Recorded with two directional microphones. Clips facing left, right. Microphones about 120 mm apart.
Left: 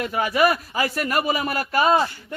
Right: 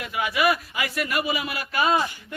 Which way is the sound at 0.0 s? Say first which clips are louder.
Left 4 dB; 40° left (ahead or behind).